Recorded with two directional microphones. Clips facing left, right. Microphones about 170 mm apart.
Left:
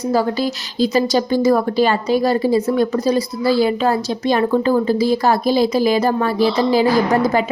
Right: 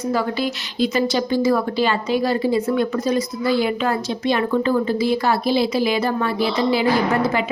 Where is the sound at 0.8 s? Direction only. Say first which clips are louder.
Left 3 dB; 40° left (ahead or behind).